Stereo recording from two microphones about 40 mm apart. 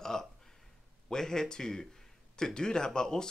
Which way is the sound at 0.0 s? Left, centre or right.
Centre.